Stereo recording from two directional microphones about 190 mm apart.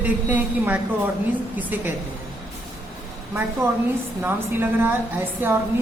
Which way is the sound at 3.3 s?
10° right (ahead or behind).